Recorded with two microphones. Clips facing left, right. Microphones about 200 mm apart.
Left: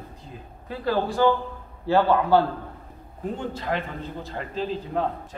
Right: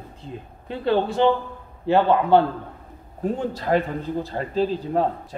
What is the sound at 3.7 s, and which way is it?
Speech, 40° right (ahead or behind).